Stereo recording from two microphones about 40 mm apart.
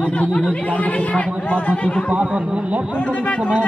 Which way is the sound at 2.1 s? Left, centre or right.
Right.